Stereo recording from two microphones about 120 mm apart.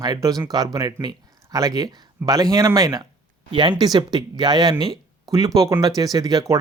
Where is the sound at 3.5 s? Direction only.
40° right (ahead or behind).